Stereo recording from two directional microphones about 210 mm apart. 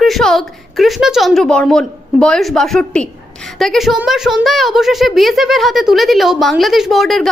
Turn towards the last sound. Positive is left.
turn(degrees=0)  # may be behind; listen again after turning